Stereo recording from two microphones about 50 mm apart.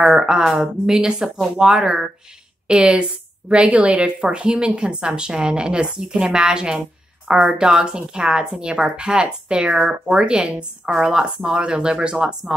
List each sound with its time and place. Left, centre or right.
0.0 s speech: centre